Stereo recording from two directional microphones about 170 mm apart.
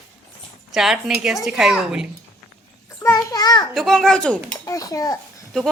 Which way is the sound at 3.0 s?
20° left (ahead or behind).